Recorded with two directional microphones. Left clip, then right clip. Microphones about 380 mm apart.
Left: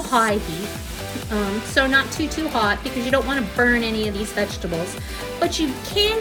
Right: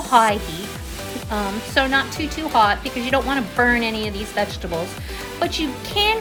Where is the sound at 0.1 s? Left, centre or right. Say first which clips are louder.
Right 4 dB; centre.